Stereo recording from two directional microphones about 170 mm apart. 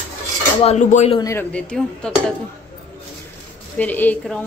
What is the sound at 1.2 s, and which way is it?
Speech, 20° left (ahead or behind).